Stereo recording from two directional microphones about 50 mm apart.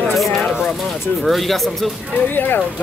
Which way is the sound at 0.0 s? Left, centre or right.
Centre.